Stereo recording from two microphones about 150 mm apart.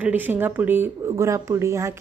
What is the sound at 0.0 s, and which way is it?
Speech, 10° right (ahead or behind).